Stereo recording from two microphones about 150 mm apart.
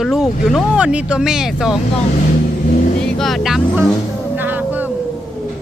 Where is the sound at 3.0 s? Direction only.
5° left (ahead or behind).